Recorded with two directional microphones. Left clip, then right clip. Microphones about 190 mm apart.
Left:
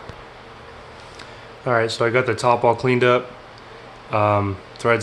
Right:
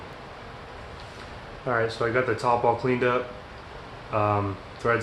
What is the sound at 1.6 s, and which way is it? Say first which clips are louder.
Speech: left 6 dB; 60° left (ahead or behind).